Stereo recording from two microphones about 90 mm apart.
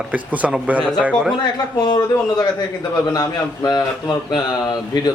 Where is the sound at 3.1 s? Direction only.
50° left (ahead or behind).